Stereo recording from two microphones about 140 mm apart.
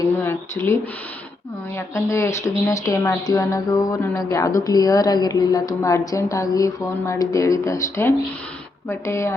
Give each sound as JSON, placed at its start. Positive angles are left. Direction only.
{"t": 0.2, "sound": "speech", "side_deg": 20}